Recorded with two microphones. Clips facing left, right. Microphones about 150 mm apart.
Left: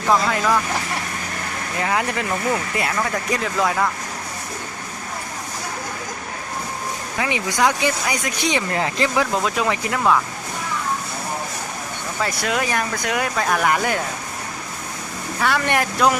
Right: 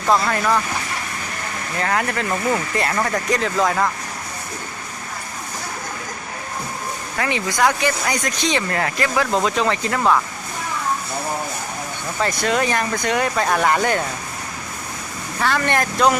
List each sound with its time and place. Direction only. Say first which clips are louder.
0.1 s speech: even; 5° left (ahead or behind)
1.8 s speech: right 1 dB; 15° left (ahead or behind)
2.5 s speech: right 2 dB; 5° left (ahead or behind)
7.2 s speech: right 1 dB; 15° left (ahead or behind)
9.3 s speech: right 2 dB; 5° left (ahead or behind)
12.2 s speech: right 3 dB; 5° left (ahead or behind)
15.4 s speech: even; 5° left (ahead or behind)